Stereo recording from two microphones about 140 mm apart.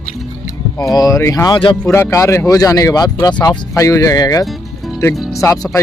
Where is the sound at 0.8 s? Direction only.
25° left (ahead or behind).